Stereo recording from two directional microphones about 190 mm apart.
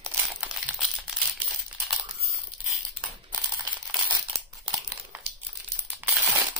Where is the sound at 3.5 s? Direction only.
20° right (ahead or behind).